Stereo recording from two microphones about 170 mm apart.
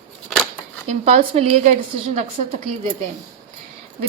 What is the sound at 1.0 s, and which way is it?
Speech, 35° right (ahead or behind).